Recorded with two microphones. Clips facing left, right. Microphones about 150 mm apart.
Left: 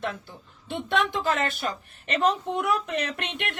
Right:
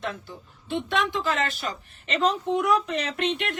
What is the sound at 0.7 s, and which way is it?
A woman's voice, 55° left (ahead or behind).